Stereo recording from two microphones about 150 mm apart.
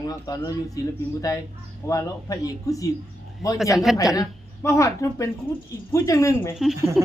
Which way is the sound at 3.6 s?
Centre (ahead or behind).